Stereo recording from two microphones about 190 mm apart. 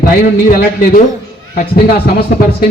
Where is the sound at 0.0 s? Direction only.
45° left (ahead or behind).